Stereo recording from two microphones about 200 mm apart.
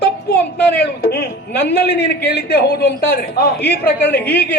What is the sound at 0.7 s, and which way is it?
A man's voice, 55° left (ahead or behind).